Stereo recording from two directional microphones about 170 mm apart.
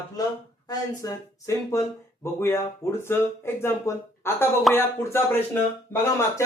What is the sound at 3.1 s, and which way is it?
Speech, 15° left (ahead or behind).